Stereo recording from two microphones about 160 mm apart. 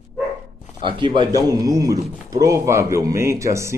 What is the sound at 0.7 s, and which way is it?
Speech, 30° right (ahead or behind).